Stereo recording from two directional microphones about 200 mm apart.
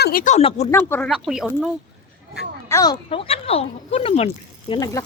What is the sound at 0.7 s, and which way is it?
Speech, 10° left (ahead or behind).